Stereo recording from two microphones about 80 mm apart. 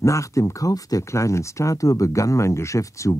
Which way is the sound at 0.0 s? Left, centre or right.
Left.